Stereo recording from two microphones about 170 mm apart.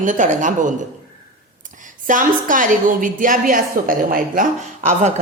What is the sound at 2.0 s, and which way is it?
A woman's voice, 50° right (ahead or behind).